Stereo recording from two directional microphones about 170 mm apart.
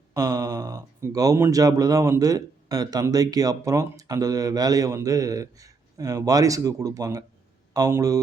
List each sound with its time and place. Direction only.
0.1 s speech: 20° right (ahead or behind)